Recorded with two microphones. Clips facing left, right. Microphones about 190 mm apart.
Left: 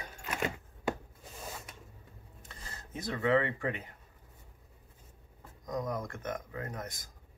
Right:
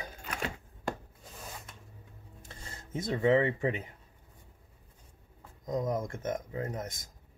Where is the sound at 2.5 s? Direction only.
25° right (ahead or behind).